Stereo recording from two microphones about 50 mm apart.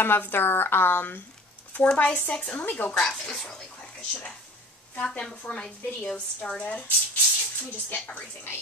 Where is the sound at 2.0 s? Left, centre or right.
Left.